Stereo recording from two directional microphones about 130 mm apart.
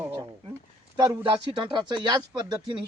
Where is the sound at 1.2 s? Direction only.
35° right (ahead or behind).